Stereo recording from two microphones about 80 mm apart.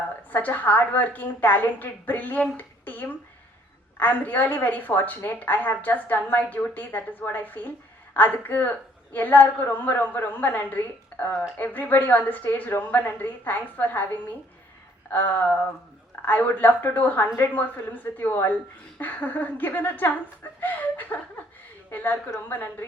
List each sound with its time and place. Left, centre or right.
0.3 s a woman's voice: left
2.6 s a sound: left
4.0 s a woman's voice: left
15.1 s a woman's voice: left